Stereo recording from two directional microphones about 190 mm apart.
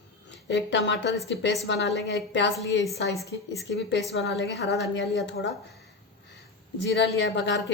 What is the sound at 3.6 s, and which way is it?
A woman's voice, 60° left (ahead or behind).